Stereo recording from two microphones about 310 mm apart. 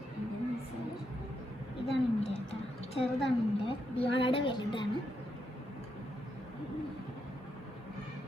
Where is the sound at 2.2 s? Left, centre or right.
Left.